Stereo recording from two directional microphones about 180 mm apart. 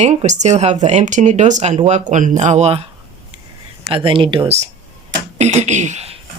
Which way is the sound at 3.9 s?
30° right (ahead or behind).